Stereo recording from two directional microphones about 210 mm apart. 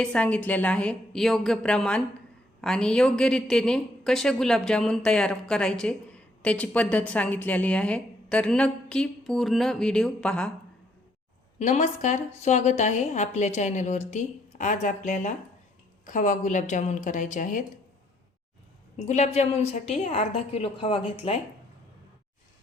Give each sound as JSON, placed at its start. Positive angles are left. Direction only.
{"t": 0.0, "sound": "a woman's voice", "side_deg": 5}
{"t": 11.6, "sound": "a woman's voice", "side_deg": 35}
{"t": 18.9, "sound": "a woman's voice", "side_deg": 30}